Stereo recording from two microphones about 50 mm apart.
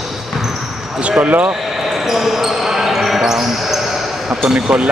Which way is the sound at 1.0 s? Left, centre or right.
Right.